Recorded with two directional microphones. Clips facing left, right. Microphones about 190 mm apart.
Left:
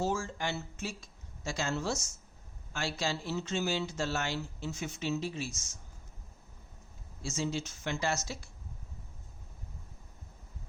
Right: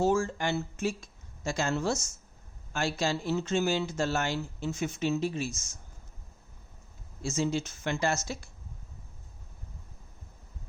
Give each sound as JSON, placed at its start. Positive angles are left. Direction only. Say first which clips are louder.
{"t": 0.0, "sound": "speech", "louder": "right 6 dB", "side_deg": -55}
{"t": 7.2, "sound": "speech", "louder": "right 5 dB", "side_deg": -50}